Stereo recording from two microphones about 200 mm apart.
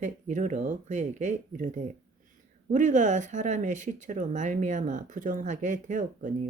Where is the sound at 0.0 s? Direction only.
40° right (ahead or behind).